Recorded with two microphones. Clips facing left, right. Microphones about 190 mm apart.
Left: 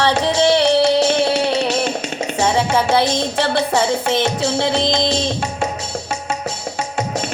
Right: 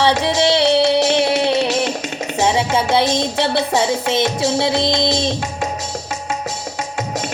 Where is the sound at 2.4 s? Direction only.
20° right (ahead or behind).